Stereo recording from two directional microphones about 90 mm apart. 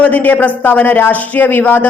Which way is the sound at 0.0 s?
20° left (ahead or behind).